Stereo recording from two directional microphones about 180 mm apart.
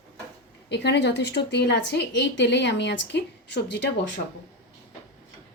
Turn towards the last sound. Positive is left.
turn(degrees=75)  # may be behind; listen again after turning